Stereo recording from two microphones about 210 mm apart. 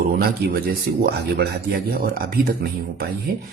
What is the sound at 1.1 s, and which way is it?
A man's voice, 50° right (ahead or behind).